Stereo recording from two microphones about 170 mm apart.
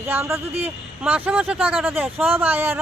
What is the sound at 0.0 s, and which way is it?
Speech, 15° right (ahead or behind).